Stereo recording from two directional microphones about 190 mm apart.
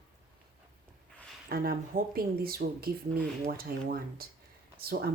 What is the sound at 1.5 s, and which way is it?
Speech, 50° right (ahead or behind).